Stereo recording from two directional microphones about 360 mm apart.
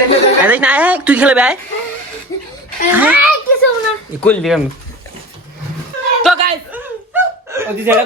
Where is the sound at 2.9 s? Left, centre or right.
Centre.